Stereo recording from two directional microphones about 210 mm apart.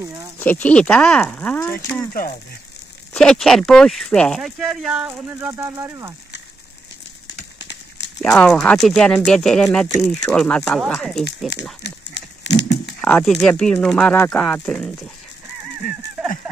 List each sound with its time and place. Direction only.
0.4 s speech: 5° left (ahead or behind)
3.1 s speech: 5° left (ahead or behind); by 6.1 s 15° right (ahead or behind)
8.2 s speech: 5° left (ahead or behind)
11.8 s a sound: 55° left (ahead or behind)
13.0 s speech: 5° left (ahead or behind)